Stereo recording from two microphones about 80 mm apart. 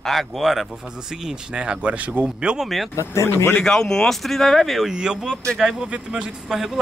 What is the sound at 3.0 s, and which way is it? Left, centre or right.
Speech, left.